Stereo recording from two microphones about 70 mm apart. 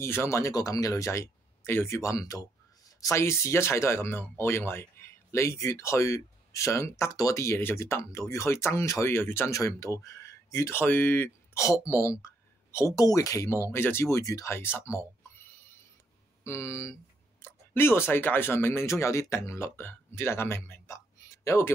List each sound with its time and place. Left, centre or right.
0.0 s speech: left
0.6 s speech: left
2.0 s a sound: left
3.2 s speech: left
7.2 s speech: left
9.5 s speech: left
11.5 s speech: left
13.0 s speech: left
13.7 s speech: left
14.1 s speech: left
16.4 s speech: left